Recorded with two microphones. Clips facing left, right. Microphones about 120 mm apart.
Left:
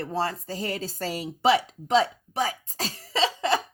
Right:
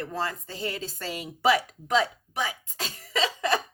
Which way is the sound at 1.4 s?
25° left (ahead or behind).